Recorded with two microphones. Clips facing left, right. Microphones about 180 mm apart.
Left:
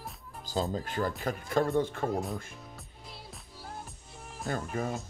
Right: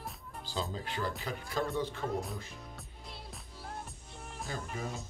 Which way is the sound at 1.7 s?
50° left (ahead or behind).